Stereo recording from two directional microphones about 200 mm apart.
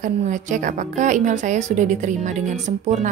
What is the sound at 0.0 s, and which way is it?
A woman's voice, 40° right (ahead or behind).